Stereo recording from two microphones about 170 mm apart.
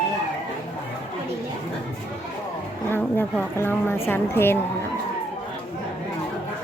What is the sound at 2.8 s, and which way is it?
A woman's voice, 10° left (ahead or behind).